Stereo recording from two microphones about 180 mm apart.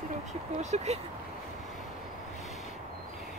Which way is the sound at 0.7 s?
35° right (ahead or behind).